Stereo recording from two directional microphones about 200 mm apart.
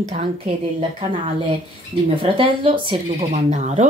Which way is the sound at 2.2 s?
25° right (ahead or behind).